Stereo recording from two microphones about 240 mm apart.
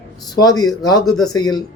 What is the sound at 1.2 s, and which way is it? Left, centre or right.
Speech, centre.